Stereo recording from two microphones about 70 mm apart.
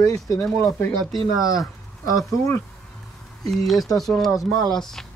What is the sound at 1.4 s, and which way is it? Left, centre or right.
Speech, left.